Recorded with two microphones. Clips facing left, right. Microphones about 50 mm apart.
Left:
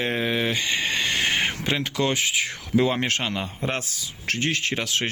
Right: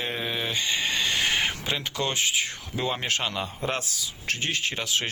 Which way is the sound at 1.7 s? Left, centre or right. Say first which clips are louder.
Left 5 dB; left.